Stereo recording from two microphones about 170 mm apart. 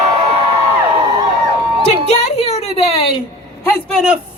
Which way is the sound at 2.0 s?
40° left (ahead or behind).